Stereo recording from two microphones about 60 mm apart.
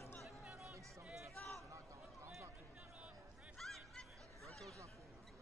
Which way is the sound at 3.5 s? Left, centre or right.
Centre.